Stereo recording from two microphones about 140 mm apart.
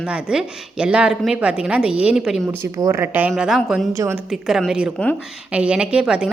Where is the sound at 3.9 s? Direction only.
20° right (ahead or behind).